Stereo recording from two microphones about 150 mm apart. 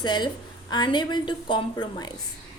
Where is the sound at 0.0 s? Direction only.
30° left (ahead or behind).